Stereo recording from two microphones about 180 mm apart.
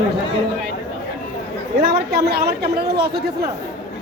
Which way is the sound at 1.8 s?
60° right (ahead or behind).